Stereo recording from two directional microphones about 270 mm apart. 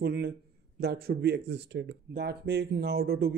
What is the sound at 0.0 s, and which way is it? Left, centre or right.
Speech, right.